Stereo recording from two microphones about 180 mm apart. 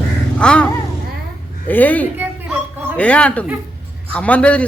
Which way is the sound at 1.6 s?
10° left (ahead or behind).